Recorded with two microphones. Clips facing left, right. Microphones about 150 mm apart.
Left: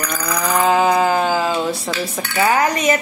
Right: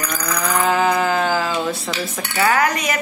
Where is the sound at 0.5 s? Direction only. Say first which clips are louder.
Left 3 dB; 15° left (ahead or behind).